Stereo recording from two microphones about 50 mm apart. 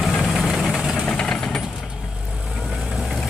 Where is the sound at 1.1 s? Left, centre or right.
Centre.